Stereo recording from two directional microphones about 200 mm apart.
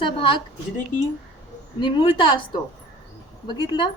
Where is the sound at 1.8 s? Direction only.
25° left (ahead or behind).